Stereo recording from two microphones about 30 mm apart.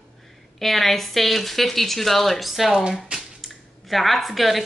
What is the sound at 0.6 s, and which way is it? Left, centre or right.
Speech, centre.